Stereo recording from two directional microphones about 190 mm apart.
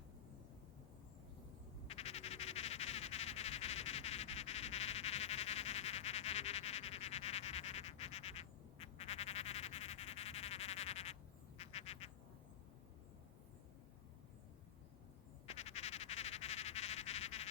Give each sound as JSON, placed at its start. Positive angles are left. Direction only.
{"t": 1.9, "sound": "frog", "side_deg": 35}
{"t": 15.4, "sound": "frog", "side_deg": 35}